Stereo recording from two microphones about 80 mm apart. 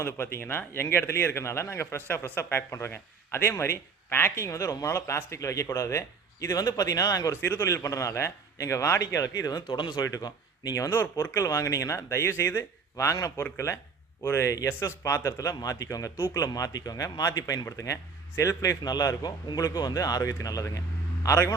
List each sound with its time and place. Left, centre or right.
0.0 s speech: left
9.6 s speech: left
10.0 s speech: left
10.9 s a man's voice: left
18.8 s speech: left